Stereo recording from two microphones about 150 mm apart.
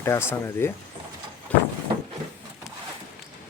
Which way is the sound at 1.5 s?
10° left (ahead or behind).